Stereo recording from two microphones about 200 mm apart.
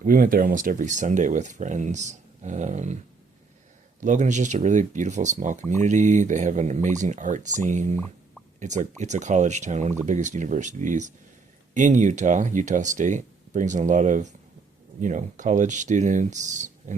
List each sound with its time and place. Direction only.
0.0 s speech: 45° right (ahead or behind)
4.0 s speech: 35° right (ahead or behind)